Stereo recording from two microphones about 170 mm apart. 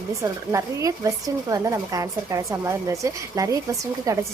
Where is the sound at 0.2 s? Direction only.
20° right (ahead or behind).